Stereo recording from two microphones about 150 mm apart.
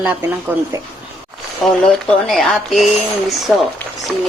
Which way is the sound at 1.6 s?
Centre (ahead or behind).